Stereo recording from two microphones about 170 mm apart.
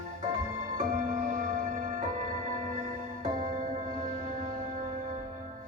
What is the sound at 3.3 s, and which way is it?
Music, 30° right (ahead or behind).